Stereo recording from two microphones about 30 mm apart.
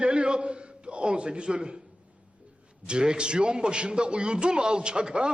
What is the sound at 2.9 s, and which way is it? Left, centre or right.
A man's voice, right.